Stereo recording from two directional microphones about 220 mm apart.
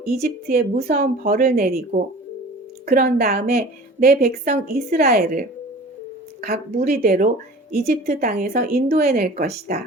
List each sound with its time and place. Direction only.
0.2 s a woman's voice: 40° right (ahead or behind)
6.8 s speech: 40° right (ahead or behind)